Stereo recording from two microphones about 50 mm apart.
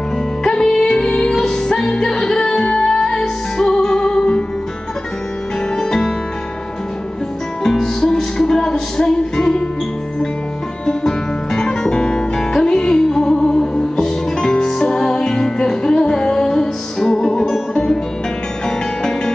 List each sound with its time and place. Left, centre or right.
0.4 s music: centre
5.8 s music: centre
7.6 s music: centre
10.9 s music: centre